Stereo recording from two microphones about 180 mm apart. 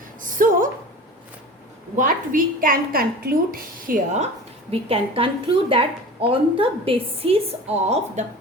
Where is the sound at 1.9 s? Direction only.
50° right (ahead or behind).